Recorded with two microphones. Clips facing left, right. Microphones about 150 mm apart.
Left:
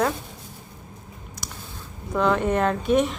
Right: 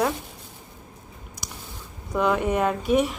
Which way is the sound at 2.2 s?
10° right (ahead or behind).